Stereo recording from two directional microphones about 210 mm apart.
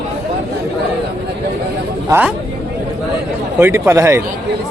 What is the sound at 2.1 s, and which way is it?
Speech, 10° right (ahead or behind).